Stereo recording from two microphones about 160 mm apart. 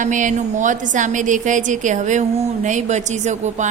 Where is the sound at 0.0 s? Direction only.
50° right (ahead or behind).